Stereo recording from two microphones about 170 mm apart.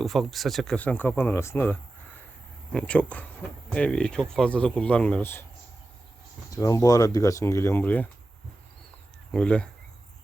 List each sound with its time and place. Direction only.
0.0 s speech: centre (ahead or behind)
6.5 s speech: 20° left (ahead or behind)
9.3 s speech: 5° left (ahead or behind)